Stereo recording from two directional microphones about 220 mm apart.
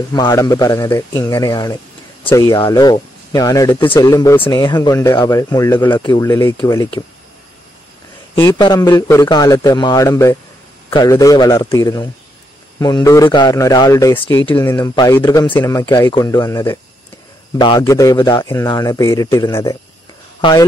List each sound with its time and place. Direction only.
0.1 s speech: 15° left (ahead or behind)
8.4 s speech: 15° left (ahead or behind)